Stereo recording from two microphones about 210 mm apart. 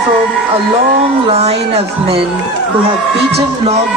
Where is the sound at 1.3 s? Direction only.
30° right (ahead or behind).